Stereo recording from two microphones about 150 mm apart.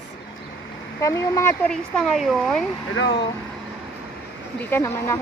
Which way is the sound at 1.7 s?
Centre (ahead or behind).